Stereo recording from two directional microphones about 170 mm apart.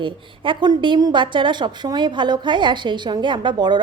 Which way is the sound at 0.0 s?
30° right (ahead or behind).